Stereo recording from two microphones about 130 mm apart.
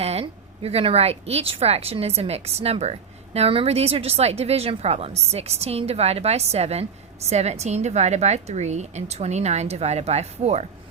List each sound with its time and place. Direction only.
0.0 s a woman's voice: 50° right (ahead or behind)